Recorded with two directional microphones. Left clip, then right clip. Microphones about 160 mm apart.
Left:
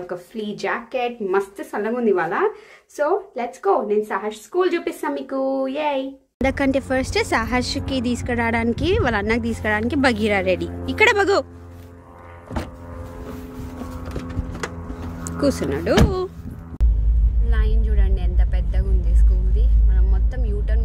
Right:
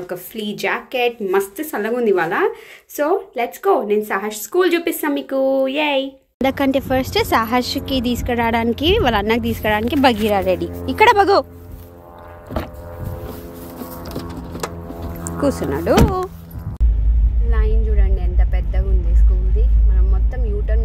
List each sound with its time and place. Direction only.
0.1 s speech: centre (ahead or behind)
4.1 s speech: 25° right (ahead or behind)
4.6 s speech: 5° right (ahead or behind); by 11.4 s 10° left (ahead or behind)
15.2 s speech: 20° left (ahead or behind)
17.9 s vehicle: 5° left (ahead or behind)